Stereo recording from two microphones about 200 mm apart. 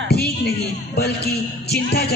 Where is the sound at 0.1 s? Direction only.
55° left (ahead or behind).